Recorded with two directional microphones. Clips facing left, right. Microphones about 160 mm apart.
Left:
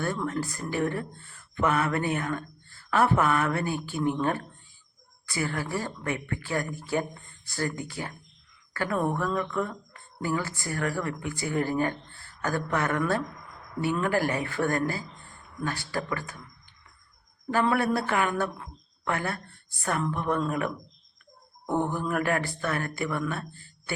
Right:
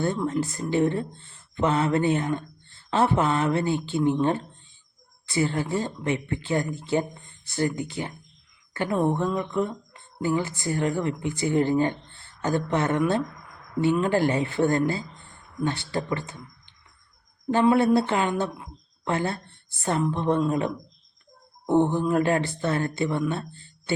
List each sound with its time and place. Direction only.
0.0 s speech: 25° right (ahead or behind)